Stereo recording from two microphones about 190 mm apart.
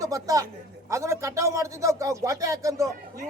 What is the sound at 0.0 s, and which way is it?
A man's voice, 20° right (ahead or behind).